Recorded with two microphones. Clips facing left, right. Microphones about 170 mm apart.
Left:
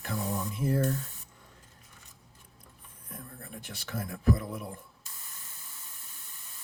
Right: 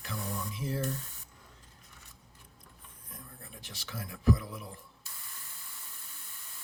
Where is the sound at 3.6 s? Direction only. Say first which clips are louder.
Left 6 dB; 55° left (ahead or behind).